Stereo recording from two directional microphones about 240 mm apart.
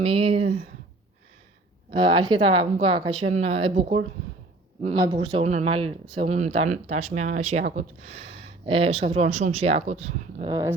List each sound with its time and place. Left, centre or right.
0.0 s speech: right
1.9 s speech: centre
5.0 s speech: right
10.5 s speech: centre